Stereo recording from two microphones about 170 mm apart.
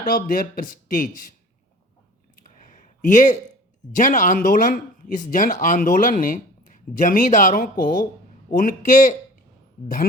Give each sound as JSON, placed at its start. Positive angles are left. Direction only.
{"t": 0.0, "sound": "speech", "side_deg": 55}
{"t": 2.8, "sound": "a sound", "side_deg": 50}
{"t": 3.9, "sound": "speech", "side_deg": 50}